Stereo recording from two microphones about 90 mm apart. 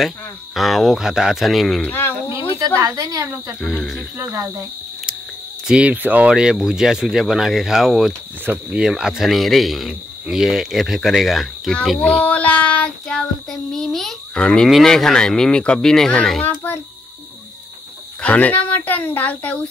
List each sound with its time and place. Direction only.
0.6 s speech: centre (ahead or behind)
1.8 s speech: 20° left (ahead or behind)
2.5 s speech: 40° right (ahead or behind)
5.7 s speech: 15° right (ahead or behind)
11.7 s child singing: 5° left (ahead or behind)
16.4 s a child's voice: 25° left (ahead or behind)
18.2 s child singing: 15° left (ahead or behind)